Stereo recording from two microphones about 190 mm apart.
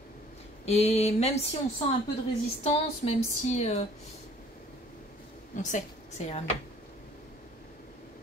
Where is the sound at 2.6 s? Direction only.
35° left (ahead or behind).